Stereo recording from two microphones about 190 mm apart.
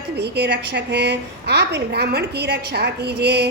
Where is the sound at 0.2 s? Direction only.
60° right (ahead or behind).